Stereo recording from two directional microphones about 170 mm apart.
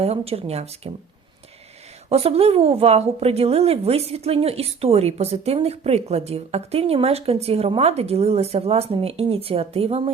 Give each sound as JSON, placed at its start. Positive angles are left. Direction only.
{"t": 0.0, "sound": "a woman's voice", "side_deg": -35}
{"t": 2.0, "sound": "a woman's voice", "side_deg": -35}